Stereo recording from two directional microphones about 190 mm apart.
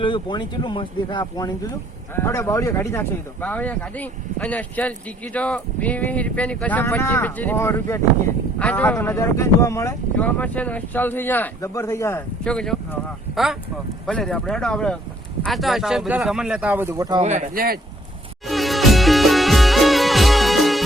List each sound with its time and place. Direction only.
0.0 s speech: 25° left (ahead or behind); by 17.2 s 20° right (ahead or behind)
17.2 s speech: 40° right (ahead or behind)
18.4 s music: centre (ahead or behind)